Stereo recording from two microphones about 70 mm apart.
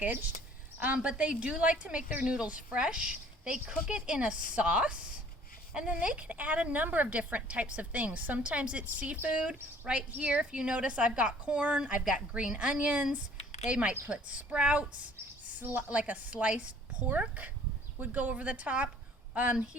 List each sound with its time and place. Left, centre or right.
0.0 s a woman's voice: right
0.9 s a woman's voice: centre